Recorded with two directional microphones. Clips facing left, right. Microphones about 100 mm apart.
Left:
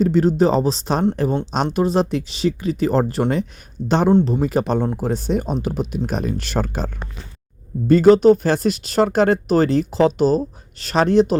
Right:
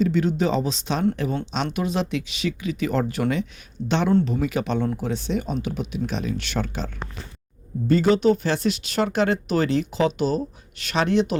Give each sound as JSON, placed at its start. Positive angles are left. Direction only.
{"t": 0.0, "sound": "speech", "side_deg": 40}